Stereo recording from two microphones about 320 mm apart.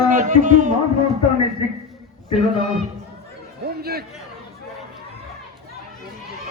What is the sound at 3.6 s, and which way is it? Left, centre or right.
Speech, right.